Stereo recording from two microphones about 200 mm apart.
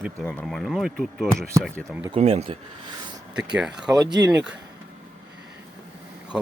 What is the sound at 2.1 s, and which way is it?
Speech, 30° right (ahead or behind).